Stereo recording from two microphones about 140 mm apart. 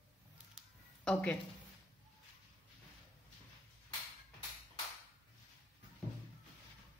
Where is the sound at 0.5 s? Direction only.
5° left (ahead or behind).